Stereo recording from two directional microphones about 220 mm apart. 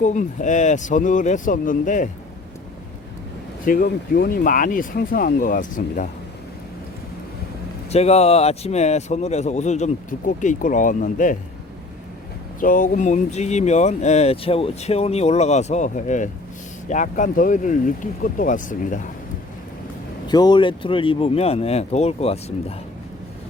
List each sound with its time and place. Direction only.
0.0 s speech: 35° left (ahead or behind)
3.6 s speech: 40° left (ahead or behind)
7.9 s speech: 30° left (ahead or behind)
12.5 s speech: 40° left (ahead or behind)
20.2 s speech: 20° left (ahead or behind)